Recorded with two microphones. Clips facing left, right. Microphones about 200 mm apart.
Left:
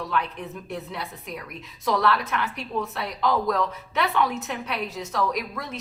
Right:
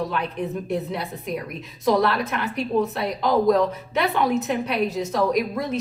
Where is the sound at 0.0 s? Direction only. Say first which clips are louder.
Right 3 dB; 20° right (ahead or behind).